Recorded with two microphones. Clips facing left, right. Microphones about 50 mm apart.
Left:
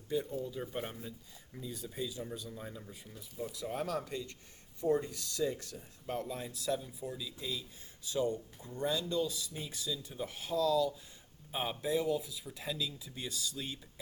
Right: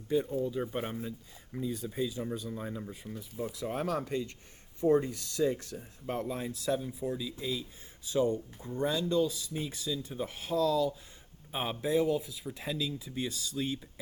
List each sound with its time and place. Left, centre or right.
0.1 s speech: right
0.6 s speech: right
1.5 s speech: right
2.6 s speech: right
2.9 s speech: right
7.2 s speech: right